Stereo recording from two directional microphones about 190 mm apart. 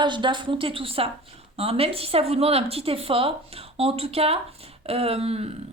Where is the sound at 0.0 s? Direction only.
25° right (ahead or behind).